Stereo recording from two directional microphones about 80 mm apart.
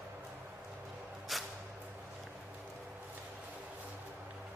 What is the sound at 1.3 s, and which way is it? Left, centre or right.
Music, centre.